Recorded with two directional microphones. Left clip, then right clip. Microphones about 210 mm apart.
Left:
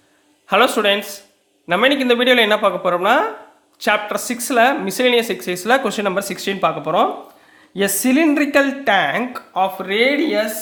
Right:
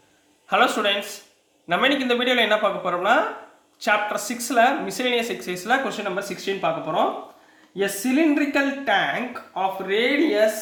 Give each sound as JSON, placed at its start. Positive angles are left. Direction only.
{"t": 0.4, "sound": "speech", "side_deg": 35}